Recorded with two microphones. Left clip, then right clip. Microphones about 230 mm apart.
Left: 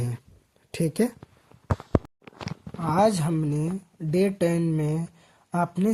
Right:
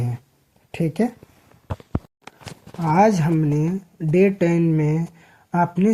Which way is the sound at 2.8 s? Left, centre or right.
Left.